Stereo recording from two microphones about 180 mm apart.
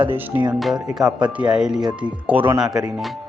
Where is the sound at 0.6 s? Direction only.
Centre (ahead or behind).